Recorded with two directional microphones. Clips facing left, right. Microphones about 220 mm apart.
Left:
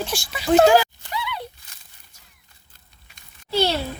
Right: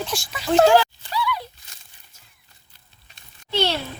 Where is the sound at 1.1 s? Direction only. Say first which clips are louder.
Right 6 dB; 20° left (ahead or behind).